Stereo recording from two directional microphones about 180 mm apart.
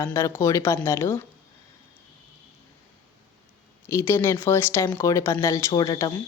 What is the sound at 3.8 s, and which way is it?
A woman's voice, 15° left (ahead or behind).